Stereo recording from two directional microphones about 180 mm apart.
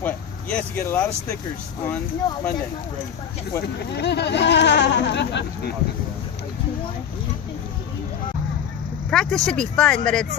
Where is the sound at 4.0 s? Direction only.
70° left (ahead or behind).